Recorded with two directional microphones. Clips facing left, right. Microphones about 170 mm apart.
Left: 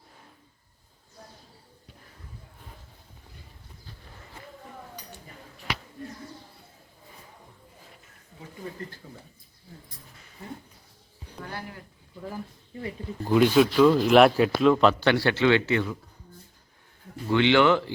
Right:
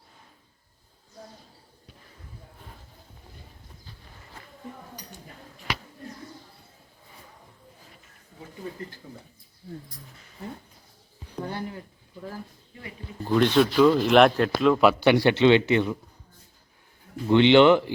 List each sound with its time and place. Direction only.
13.2 s speech: 10° left (ahead or behind); by 16.0 s 20° right (ahead or behind)
17.2 s speech: 20° right (ahead or behind)